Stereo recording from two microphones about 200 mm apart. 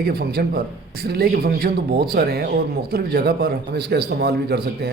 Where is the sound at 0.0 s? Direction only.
50° right (ahead or behind).